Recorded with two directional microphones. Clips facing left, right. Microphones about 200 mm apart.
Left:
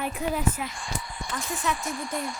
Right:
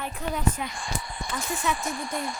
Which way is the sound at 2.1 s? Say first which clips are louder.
Even; 40° right (ahead or behind).